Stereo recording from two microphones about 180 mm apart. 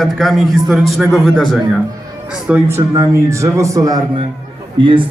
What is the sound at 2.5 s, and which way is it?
A man's voice, 15° right (ahead or behind).